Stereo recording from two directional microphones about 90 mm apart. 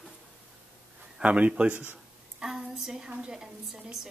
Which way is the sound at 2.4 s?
5° right (ahead or behind).